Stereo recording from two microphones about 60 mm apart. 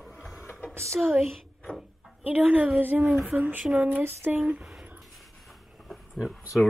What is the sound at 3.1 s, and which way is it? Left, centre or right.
Speech, centre.